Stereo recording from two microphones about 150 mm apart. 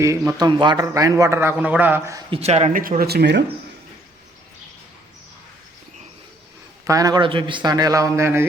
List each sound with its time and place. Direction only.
0.0 s a man's voice: 20° right (ahead or behind)
2.3 s speech: 45° right (ahead or behind)
3.0 s speech: 90° right
6.8 s a man's voice: 25° right (ahead or behind)